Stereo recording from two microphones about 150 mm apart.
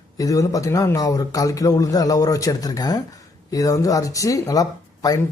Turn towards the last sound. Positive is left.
turn(degrees=25)  # may be behind; listen again after turning